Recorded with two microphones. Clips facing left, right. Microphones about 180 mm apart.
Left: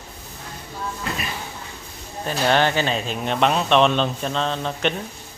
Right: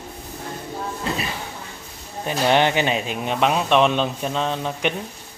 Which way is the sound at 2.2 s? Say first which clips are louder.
Right 1 dB; 15° right (ahead or behind).